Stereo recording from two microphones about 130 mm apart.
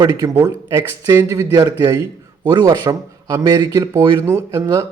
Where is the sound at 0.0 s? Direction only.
25° right (ahead or behind).